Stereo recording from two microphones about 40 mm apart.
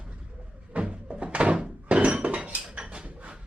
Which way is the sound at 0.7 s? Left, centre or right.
Right.